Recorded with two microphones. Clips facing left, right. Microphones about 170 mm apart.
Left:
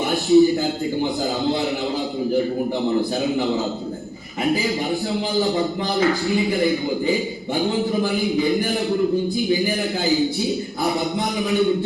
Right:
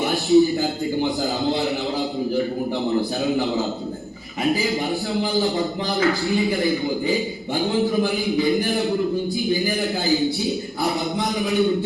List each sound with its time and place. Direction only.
0.3 s speech: centre (ahead or behind)
6.2 s speech: centre (ahead or behind)
6.7 s a man's voice: 20° left (ahead or behind)
7.6 s speech: centre (ahead or behind)